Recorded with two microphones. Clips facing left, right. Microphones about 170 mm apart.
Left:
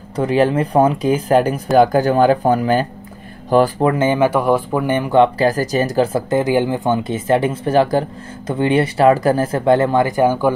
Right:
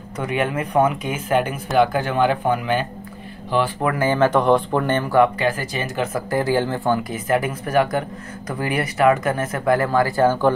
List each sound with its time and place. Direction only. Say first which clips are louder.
0.1 s speech: left 8 dB; 30° left (ahead or behind)
3.8 s speech: left 4 dB; 20° left (ahead or behind)
5.4 s speech: left 7 dB; 40° left (ahead or behind)
6.3 s speech: left 3 dB; 15° left (ahead or behind)